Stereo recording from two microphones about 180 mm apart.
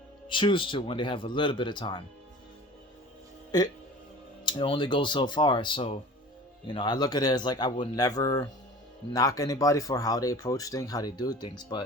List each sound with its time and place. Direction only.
0.3 s speech: 30° left (ahead or behind)
3.5 s speech: 25° left (ahead or behind)